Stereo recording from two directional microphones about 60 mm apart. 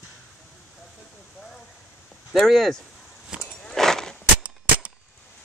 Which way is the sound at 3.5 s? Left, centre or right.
Centre.